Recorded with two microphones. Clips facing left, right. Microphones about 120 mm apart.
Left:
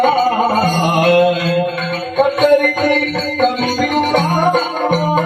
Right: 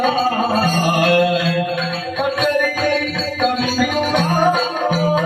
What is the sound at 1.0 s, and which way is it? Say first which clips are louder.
Mantra: left 4 dB; 30° left (ahead or behind).